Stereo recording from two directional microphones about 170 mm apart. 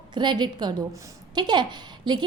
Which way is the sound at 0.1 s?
25° right (ahead or behind).